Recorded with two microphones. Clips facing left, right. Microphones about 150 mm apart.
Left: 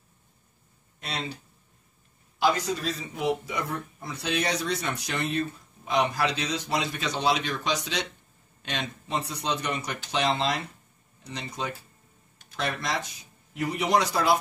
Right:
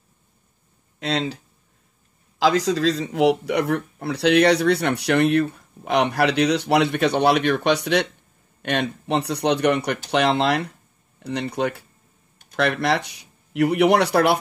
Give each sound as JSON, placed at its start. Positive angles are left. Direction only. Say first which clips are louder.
{"t": 0.9, "sound": "speech", "louder": "right 10 dB", "side_deg": -90}